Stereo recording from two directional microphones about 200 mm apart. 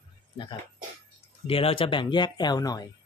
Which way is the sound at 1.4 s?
30° left (ahead or behind).